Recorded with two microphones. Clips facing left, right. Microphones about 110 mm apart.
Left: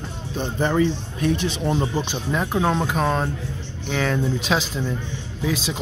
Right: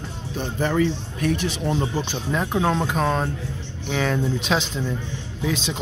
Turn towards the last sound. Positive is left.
turn(degrees=5)  # may be behind; listen again after turning